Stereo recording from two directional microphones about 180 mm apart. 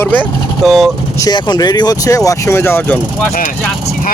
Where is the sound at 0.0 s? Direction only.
10° left (ahead or behind).